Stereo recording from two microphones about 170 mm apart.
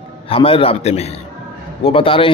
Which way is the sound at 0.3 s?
30° left (ahead or behind).